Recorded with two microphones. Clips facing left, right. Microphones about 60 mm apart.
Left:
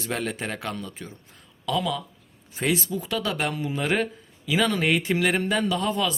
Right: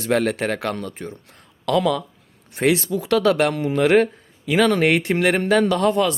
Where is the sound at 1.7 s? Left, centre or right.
Right.